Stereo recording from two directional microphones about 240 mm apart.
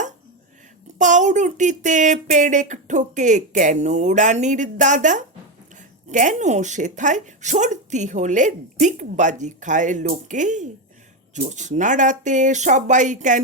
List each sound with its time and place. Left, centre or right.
0.9 s speech: right